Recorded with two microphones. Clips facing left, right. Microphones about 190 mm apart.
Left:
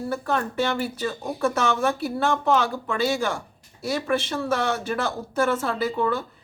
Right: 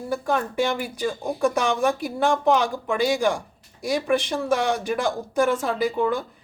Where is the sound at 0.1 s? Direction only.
10° right (ahead or behind).